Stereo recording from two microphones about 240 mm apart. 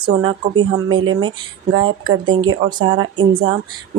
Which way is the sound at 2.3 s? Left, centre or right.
Centre.